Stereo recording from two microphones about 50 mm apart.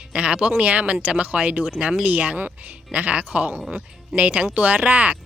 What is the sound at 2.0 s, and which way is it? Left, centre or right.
Speech, right.